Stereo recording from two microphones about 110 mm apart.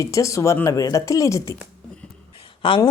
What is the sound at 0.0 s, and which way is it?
Speech, 30° left (ahead or behind).